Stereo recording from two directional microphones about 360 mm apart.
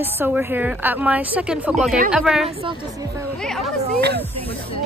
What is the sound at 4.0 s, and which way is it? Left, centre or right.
Speech, right.